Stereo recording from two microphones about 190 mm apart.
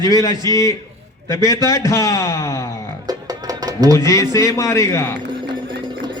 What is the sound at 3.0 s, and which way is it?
Music, 20° right (ahead or behind).